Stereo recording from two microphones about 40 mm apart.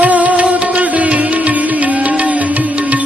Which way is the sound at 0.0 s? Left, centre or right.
Right.